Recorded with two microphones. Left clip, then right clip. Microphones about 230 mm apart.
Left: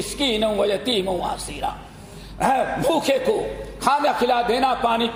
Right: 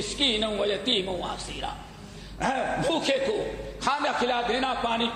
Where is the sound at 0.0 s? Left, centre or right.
Left.